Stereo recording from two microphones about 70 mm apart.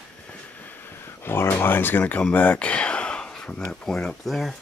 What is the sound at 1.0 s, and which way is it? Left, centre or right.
Speech, left.